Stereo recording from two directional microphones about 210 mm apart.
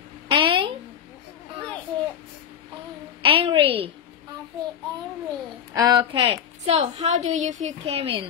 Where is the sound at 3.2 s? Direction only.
25° right (ahead or behind).